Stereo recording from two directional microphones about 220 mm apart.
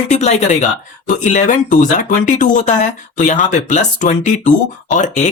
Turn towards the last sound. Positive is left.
turn(degrees=35)  # may be behind; listen again after turning